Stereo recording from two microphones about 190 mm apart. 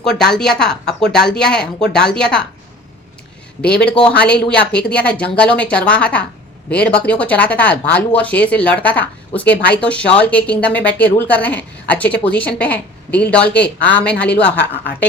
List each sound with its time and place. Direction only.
0.2 s speech: 5° left (ahead or behind)
3.8 s speech: 5° left (ahead or behind)